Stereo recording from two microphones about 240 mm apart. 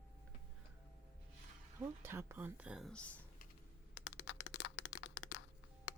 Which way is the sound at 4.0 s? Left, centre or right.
Left.